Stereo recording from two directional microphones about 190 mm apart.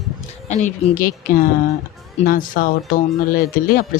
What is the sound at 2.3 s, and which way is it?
Speech, 45° left (ahead or behind).